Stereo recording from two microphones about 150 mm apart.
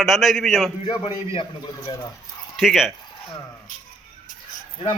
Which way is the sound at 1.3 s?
25° left (ahead or behind).